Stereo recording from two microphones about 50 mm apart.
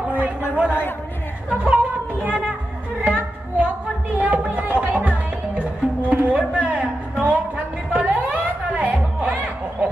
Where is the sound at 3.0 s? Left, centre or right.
Right.